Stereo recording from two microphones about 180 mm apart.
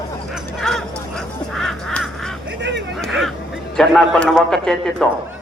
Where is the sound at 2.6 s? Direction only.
75° right (ahead or behind).